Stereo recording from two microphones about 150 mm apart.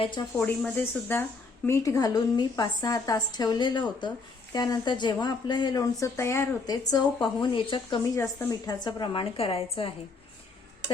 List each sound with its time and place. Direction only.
0.0 s a woman's voice: 30° left (ahead or behind)
0.3 s speech: 10° left (ahead or behind); by 8.0 s 35° left (ahead or behind)
8.1 s a woman's voice: 20° left (ahead or behind); by 9.9 s 40° left (ahead or behind)